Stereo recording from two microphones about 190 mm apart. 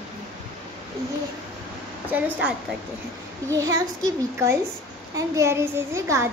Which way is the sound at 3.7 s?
15° right (ahead or behind).